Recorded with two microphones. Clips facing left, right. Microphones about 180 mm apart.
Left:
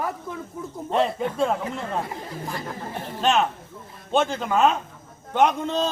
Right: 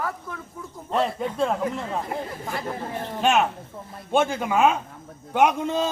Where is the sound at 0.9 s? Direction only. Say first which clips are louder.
Left 1 dB; centre (ahead or behind).